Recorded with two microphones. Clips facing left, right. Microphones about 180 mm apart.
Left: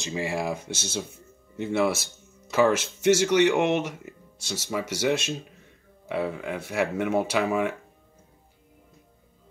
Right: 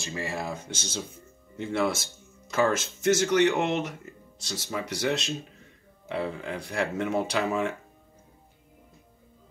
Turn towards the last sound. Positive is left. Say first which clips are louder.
# left 2 dB
turn(degrees=10)  # may be behind; listen again after turning